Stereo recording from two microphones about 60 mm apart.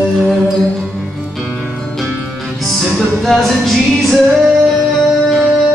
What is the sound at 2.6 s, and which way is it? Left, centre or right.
Music, centre.